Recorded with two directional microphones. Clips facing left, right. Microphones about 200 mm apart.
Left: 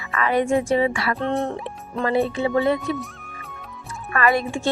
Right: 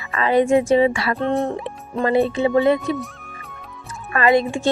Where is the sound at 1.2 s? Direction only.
Centre (ahead or behind).